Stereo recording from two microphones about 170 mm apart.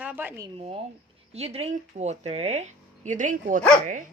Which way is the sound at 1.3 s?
35° right (ahead or behind).